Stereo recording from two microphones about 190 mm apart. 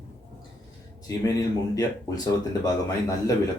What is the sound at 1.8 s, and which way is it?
A man's voice, 20° left (ahead or behind).